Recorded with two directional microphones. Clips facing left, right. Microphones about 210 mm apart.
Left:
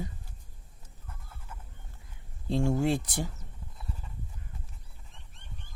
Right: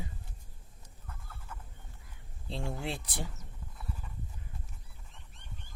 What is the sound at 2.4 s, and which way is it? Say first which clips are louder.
Speech: left 11 dB; 45° left (ahead or behind).